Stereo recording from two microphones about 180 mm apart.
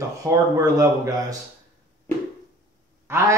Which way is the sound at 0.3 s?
20° right (ahead or behind).